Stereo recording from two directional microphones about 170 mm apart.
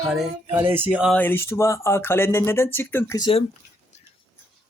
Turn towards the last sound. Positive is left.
turn(degrees=20)  # may be behind; listen again after turning